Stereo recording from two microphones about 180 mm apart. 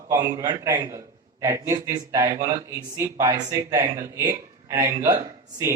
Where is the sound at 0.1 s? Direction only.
20° right (ahead or behind).